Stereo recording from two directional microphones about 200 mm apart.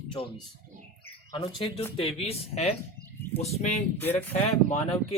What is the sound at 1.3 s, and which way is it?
Speech, 25° left (ahead or behind).